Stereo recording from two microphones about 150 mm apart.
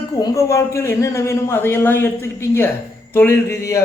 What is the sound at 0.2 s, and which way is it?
A man's voice, 20° left (ahead or behind).